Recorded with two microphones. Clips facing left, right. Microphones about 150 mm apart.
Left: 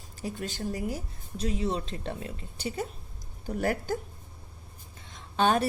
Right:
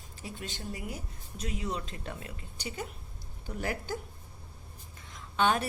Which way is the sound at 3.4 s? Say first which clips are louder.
Left 6 dB; 45° left (ahead or behind).